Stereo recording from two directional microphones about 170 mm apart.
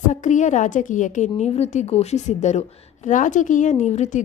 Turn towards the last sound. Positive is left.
turn(degrees=45)  # may be behind; listen again after turning